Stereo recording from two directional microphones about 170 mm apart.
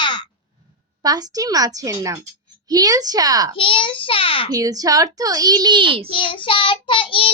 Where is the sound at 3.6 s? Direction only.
30° left (ahead or behind).